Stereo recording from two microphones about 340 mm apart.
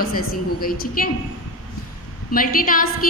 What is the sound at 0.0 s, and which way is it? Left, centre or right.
A woman's voice, left.